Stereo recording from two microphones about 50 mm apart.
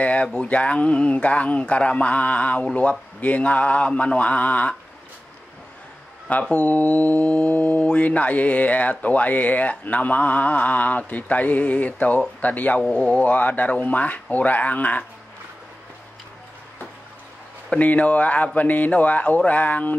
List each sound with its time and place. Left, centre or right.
0.0 s a sound: left
0.3 s speech: left
6.4 s speech: left
12.9 s speech: centre
13.2 s speech: left
17.7 s speech: left